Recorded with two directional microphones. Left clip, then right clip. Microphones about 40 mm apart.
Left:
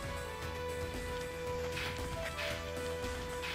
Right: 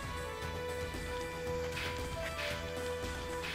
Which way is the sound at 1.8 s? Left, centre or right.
Right.